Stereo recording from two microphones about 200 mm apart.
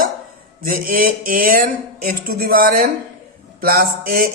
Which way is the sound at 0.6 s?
45° right (ahead or behind).